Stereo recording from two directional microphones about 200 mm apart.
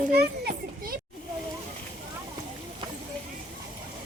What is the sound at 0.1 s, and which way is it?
Children playing, 50° right (ahead or behind).